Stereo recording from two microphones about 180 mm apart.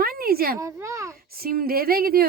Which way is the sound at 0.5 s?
15° right (ahead or behind).